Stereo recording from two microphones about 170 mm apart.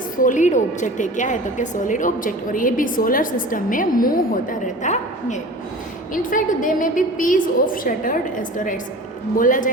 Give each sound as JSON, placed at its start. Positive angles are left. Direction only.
{"t": 0.2, "sound": "a woman's voice", "side_deg": 50}